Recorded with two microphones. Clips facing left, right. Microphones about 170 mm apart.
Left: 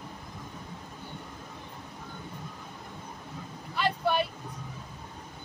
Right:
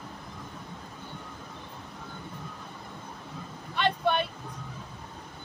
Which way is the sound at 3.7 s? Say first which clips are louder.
Right 1 dB; 5° left (ahead or behind).